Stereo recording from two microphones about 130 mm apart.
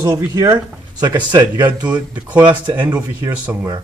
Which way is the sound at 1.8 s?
10° right (ahead or behind).